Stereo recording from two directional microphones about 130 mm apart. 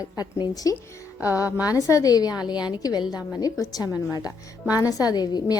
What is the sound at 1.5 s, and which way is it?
Speech, 10° right (ahead or behind).